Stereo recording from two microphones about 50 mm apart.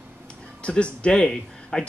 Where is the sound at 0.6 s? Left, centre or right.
Left.